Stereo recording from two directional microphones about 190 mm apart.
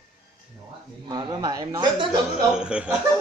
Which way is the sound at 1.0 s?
20° right (ahead or behind).